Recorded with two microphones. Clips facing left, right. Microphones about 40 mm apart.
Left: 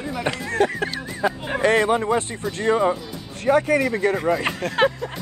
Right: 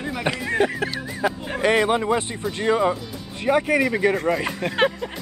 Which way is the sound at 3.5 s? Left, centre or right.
Centre.